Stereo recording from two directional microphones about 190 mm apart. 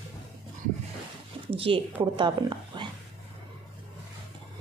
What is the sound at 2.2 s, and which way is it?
Speech, 25° right (ahead or behind).